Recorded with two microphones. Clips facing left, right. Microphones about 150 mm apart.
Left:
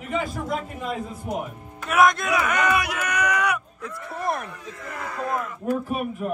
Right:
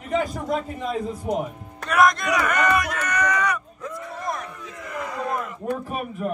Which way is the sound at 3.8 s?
60° left (ahead or behind).